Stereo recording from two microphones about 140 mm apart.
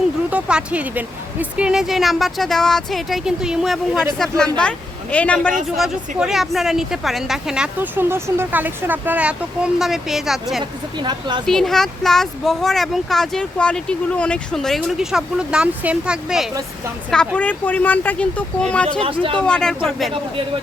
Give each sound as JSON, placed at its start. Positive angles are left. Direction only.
{"t": 0.3, "sound": "speech", "side_deg": -10}
{"t": 5.7, "sound": "speech", "side_deg": -5}
{"t": 10.6, "sound": "speech", "side_deg": -30}
{"t": 11.4, "sound": "speech", "side_deg": 0}
{"t": 17.1, "sound": "speech", "side_deg": 10}
{"t": 19.0, "sound": "speech", "side_deg": -40}
{"t": 19.4, "sound": "speech", "side_deg": 5}